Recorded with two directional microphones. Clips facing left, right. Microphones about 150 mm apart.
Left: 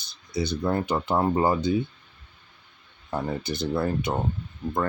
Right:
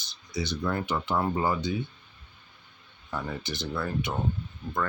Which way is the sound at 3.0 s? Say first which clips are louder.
Left 5 dB; 35° left (ahead or behind).